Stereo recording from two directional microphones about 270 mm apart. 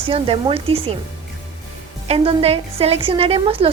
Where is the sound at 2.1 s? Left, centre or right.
Right.